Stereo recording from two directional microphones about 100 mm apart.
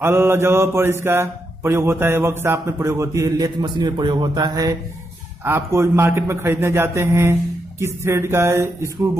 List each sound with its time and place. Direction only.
0.0 s speech: 25° right (ahead or behind); by 4.7 s 40° right (ahead or behind)
5.4 s speech: 25° right (ahead or behind)